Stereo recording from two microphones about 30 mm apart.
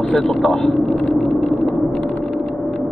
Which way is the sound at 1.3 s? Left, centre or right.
Left.